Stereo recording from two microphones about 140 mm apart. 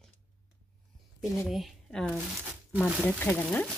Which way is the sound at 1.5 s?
Centre (ahead or behind).